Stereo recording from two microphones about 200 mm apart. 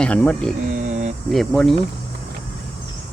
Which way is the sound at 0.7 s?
40° right (ahead or behind).